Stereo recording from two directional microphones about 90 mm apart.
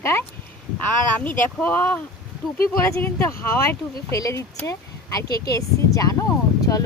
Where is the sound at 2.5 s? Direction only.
35° left (ahead or behind).